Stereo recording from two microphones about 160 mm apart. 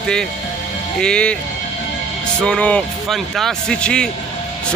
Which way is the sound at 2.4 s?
5° left (ahead or behind).